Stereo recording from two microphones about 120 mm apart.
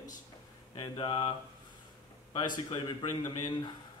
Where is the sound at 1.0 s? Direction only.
40° left (ahead or behind).